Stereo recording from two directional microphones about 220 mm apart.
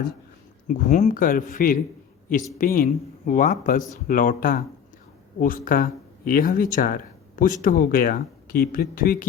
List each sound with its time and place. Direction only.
0.7 s speech: 35° left (ahead or behind)